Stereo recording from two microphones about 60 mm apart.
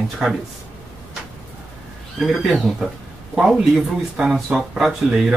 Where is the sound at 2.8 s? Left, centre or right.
Centre.